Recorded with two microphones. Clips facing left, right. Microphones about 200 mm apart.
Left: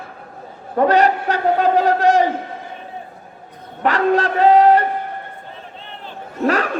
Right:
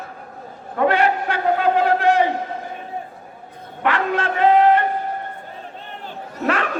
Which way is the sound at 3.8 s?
40° left (ahead or behind).